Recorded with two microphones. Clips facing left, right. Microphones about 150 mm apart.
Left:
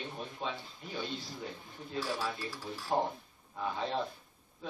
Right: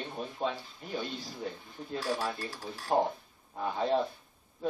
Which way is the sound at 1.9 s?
55° right (ahead or behind).